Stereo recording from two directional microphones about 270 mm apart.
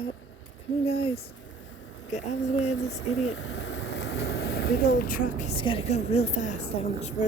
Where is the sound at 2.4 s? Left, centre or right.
Left.